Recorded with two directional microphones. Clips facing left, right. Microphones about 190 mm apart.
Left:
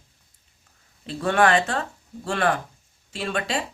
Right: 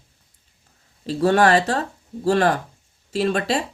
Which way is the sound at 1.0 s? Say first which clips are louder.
Right 4 dB; 35° right (ahead or behind).